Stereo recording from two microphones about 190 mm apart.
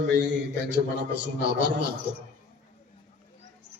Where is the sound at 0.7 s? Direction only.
65° right (ahead or behind).